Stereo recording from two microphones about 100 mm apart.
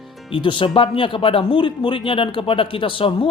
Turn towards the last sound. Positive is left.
turn(degrees=60)  # may be behind; listen again after turning